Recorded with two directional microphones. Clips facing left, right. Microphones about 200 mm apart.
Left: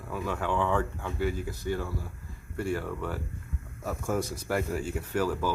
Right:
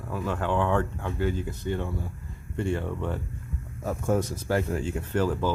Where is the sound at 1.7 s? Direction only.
25° right (ahead or behind).